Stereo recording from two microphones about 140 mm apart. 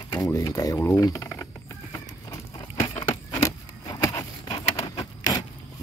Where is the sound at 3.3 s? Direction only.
25° left (ahead or behind).